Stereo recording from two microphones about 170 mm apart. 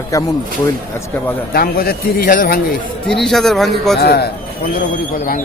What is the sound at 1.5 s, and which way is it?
Speech, 65° left (ahead or behind).